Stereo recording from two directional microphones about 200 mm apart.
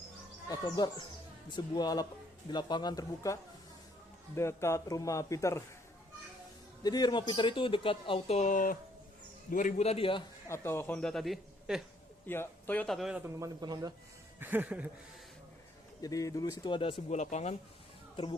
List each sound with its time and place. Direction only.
0.5 s speech: 20° left (ahead or behind)
4.4 s speech: 15° left (ahead or behind)
6.8 s a man's voice: 20° left (ahead or behind)
10.5 s a man's voice: 10° left (ahead or behind)
12.2 s a man's voice: 10° left (ahead or behind); by 13.9 s 20° right (ahead or behind)
14.3 s a sound: 10° right (ahead or behind)
16.0 s speech: 15° left (ahead or behind)
17.1 s a man's voice: 35° left (ahead or behind)